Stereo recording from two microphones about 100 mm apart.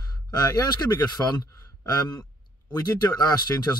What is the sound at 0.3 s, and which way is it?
Speech, 40° left (ahead or behind).